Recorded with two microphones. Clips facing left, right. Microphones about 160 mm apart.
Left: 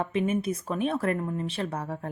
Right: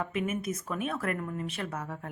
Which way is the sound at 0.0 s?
30° left (ahead or behind).